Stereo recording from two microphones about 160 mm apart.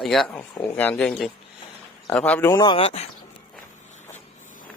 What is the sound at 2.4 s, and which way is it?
Speech, 25° left (ahead or behind).